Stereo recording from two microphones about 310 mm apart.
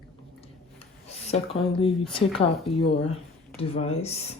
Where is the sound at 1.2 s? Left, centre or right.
Centre.